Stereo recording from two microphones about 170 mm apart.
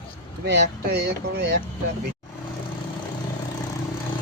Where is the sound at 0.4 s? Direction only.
75° right (ahead or behind).